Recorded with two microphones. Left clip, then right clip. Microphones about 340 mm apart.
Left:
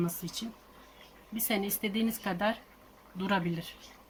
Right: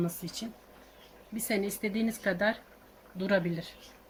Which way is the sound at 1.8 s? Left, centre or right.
Left.